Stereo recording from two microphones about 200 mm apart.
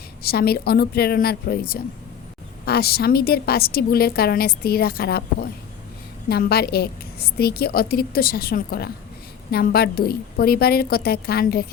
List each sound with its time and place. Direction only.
0.2 s a woman's voice: 50° left (ahead or behind)